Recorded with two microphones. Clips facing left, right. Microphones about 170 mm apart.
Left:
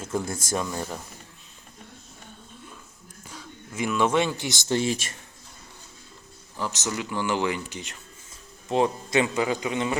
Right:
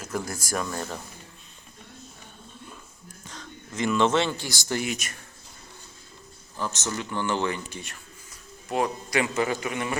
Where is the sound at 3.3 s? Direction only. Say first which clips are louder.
Even; 10° left (ahead or behind); by 5.1 s 30° left (ahead or behind).